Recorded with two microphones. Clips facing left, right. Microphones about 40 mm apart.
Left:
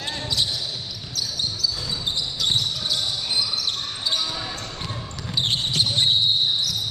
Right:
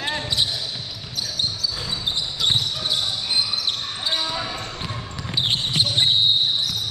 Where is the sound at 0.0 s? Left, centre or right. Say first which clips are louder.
Right 2 dB; right.